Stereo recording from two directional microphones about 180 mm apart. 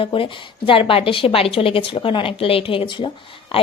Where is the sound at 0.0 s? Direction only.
30° left (ahead or behind).